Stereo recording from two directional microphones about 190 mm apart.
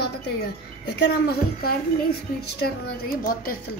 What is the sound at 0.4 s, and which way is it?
A woman's voice, 55° left (ahead or behind).